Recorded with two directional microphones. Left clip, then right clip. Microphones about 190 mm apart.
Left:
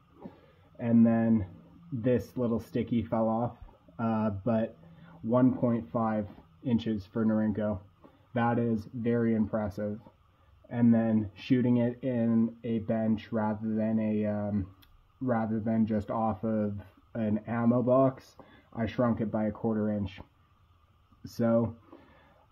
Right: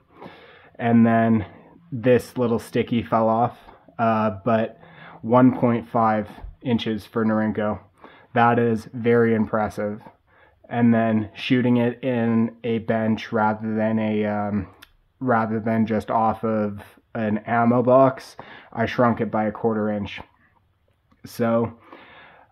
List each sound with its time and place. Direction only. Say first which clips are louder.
0.7 s speech: right 8 dB; 25° right (ahead or behind)
5.3 s speech: right 9 dB; 30° right (ahead or behind); by 21.7 s 15° right (ahead or behind)